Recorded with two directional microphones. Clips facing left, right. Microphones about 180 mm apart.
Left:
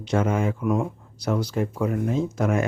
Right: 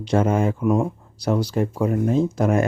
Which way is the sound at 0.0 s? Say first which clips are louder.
Right 4 dB; 35° right (ahead or behind).